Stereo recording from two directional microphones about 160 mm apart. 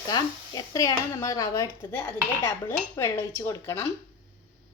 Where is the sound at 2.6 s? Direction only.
15° left (ahead or behind).